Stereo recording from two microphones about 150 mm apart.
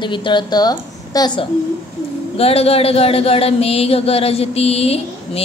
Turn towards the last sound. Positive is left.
turn(degrees=40)  # may be behind; listen again after turning